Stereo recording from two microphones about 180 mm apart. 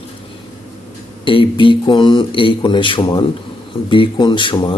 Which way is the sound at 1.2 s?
30° left (ahead or behind).